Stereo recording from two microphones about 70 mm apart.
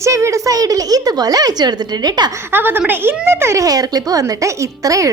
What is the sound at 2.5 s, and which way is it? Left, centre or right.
A woman's voice, right.